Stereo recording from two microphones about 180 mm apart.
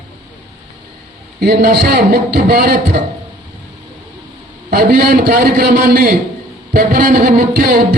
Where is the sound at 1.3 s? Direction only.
60° right (ahead or behind).